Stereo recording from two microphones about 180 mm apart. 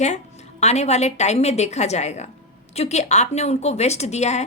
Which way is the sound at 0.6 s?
40° left (ahead or behind).